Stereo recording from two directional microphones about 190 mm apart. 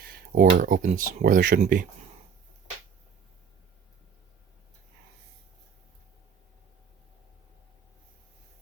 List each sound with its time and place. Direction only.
0.0 s speech: 50° right (ahead or behind)